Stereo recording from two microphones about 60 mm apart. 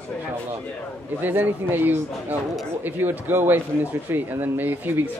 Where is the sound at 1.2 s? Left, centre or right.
Right.